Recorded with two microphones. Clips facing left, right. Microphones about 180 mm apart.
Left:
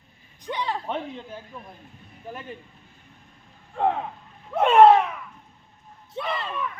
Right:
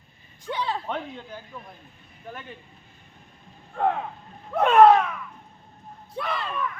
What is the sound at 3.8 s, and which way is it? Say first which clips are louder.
Speech: left 1 dB; 10° left (ahead or behind).